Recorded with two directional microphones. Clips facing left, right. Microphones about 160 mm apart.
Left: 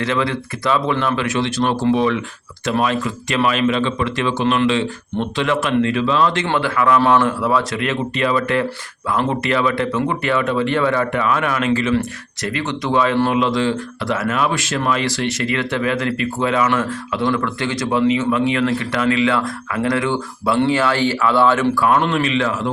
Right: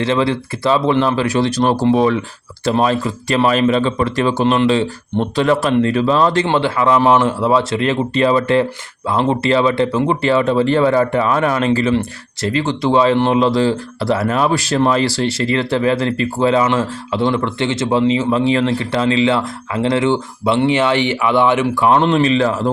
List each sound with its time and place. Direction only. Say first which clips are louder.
0.0 s speech: right 4 dB; 30° right (ahead or behind)
6.5 s speech: right 2 dB; 25° right (ahead or behind)